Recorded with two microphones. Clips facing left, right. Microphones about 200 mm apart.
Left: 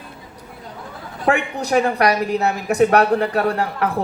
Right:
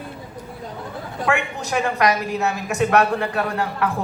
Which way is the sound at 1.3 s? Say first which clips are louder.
Left 5 dB; 35° left (ahead or behind).